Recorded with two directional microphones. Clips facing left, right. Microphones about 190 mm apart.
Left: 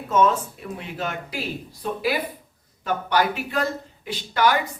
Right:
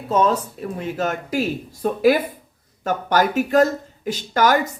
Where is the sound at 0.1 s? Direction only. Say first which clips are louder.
Right 1 dB; 35° right (ahead or behind).